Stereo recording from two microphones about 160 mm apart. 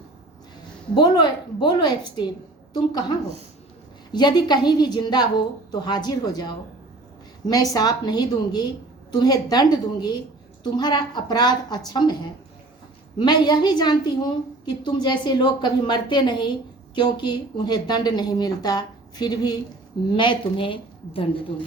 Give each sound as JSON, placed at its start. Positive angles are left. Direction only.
{"t": 0.9, "sound": "a woman's voice", "side_deg": 25}